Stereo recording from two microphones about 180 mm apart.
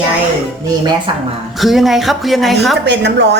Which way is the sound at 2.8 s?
70° right (ahead or behind).